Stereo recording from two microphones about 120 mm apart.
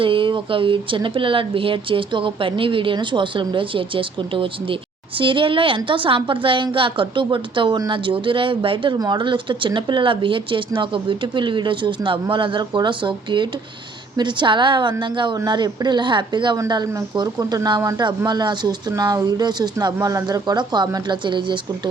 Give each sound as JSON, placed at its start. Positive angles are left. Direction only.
{"t": 0.0, "sound": "speech", "side_deg": -45}